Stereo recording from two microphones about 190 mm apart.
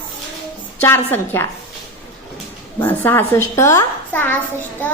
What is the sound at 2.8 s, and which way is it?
A woman's voice, 10° left (ahead or behind).